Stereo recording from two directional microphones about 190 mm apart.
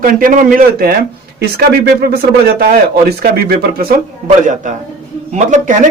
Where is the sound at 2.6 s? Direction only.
50° right (ahead or behind).